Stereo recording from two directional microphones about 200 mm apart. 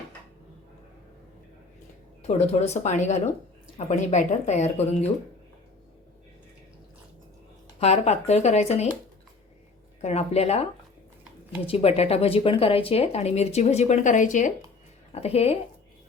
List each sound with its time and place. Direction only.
2.2 s speech: 35° left (ahead or behind)
7.8 s speech: 35° left (ahead or behind)
10.0 s speech: 30° left (ahead or behind)